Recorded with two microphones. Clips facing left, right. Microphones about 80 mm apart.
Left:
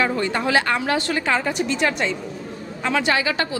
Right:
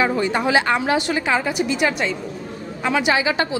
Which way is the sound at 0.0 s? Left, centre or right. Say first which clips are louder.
Right 2 dB; centre.